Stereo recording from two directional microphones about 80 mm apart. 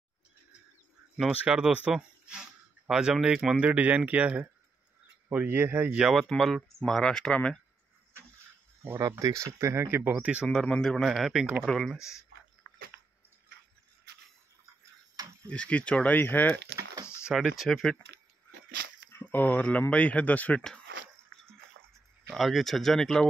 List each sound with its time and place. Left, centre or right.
1.2 s speech: centre
5.9 s speech: centre
6.2 s speech: centre
9.2 s speech: right; by 10.5 s centre
10.7 s speech: centre
11.6 s speech: centre
15.4 s a man's voice: centre
17.2 s speech: centre
19.3 s a man's voice: centre
22.3 s speech: centre